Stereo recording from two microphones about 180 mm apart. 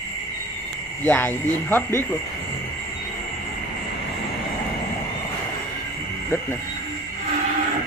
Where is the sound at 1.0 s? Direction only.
10° left (ahead or behind).